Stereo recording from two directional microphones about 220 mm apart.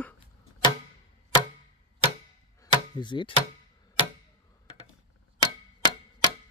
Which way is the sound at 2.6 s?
20° left (ahead or behind).